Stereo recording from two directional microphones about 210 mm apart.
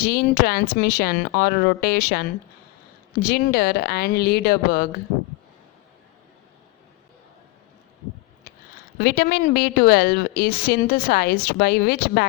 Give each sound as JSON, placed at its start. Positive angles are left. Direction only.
{"t": 0.0, "sound": "a woman's voice", "side_deg": 45}
{"t": 3.2, "sound": "a woman's voice", "side_deg": 50}
{"t": 9.0, "sound": "a woman's voice", "side_deg": 45}